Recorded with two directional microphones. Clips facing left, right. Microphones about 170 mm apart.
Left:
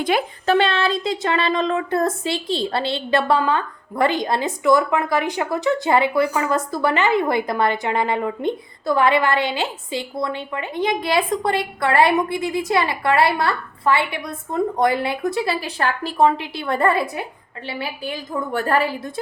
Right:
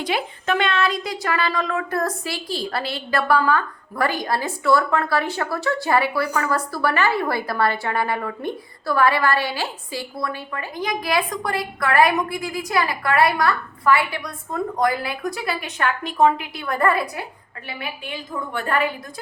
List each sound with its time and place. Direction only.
0.1 s speech: 50° left (ahead or behind)
0.4 s a woman's voice: 30° left (ahead or behind)